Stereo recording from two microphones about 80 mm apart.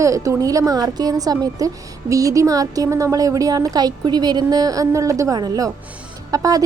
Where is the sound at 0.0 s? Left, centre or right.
Right.